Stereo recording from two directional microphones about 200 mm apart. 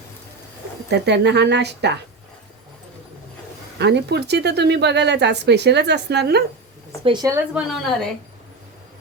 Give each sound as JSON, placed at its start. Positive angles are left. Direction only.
{"t": 0.9, "sound": "a woman's voice", "side_deg": -60}
{"t": 3.8, "sound": "a woman's voice", "side_deg": -55}
{"t": 7.0, "sound": "speech", "side_deg": -20}
{"t": 7.5, "sound": "a woman's voice", "side_deg": 0}